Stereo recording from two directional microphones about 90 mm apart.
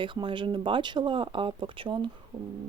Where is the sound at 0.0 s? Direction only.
65° right (ahead or behind).